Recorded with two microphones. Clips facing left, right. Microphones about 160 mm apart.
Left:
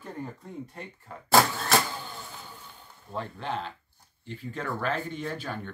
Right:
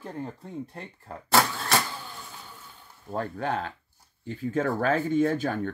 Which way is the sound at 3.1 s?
45° right (ahead or behind).